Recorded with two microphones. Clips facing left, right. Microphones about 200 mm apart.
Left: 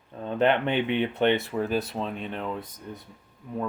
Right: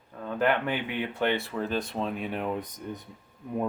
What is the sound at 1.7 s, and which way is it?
Speech, 5° left (ahead or behind).